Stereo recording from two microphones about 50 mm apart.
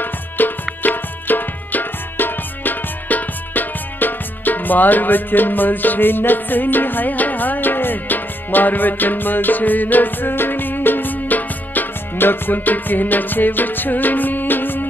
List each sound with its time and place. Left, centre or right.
0.4 s music: left